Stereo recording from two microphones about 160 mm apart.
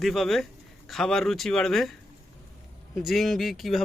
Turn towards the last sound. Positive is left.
turn(degrees=0)  # may be behind; listen again after turning